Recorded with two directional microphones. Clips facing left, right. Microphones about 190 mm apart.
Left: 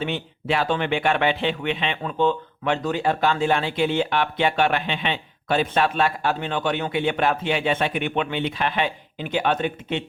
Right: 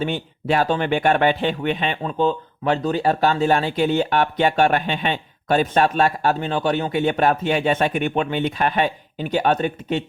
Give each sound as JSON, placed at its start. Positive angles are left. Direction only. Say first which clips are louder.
{"t": 0.0, "sound": "speech", "louder": "right 3 dB", "side_deg": -45}